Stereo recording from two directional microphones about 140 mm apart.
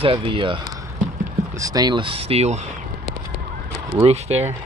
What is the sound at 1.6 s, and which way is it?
Speech, 25° right (ahead or behind).